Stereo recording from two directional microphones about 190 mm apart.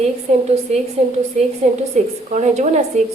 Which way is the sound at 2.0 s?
35° right (ahead or behind).